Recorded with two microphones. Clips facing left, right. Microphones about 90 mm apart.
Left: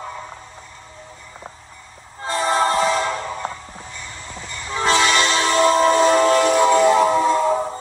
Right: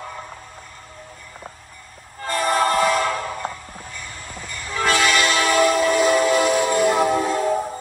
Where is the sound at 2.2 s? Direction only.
20° left (ahead or behind).